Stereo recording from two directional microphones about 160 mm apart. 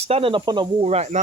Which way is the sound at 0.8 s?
40° right (ahead or behind).